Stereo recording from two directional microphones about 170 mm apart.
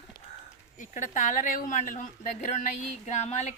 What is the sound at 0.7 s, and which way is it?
A woman's voice, 50° left (ahead or behind).